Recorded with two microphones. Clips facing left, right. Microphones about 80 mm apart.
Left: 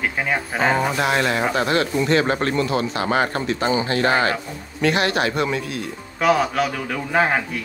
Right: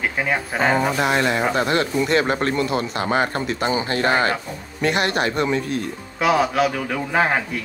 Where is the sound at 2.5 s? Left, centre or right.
Centre.